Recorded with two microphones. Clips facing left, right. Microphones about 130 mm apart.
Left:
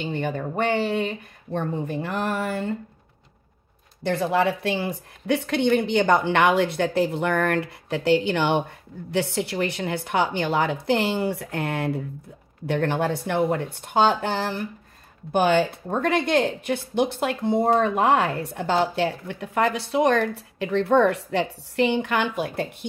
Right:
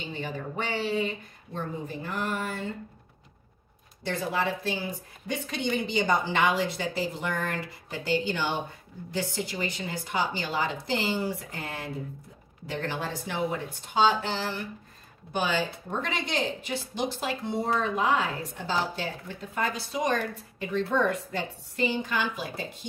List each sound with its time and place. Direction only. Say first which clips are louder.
0.0 s speech: left 8 dB; 60° left (ahead or behind)
4.0 s speech: left 7 dB; 60° left (ahead or behind)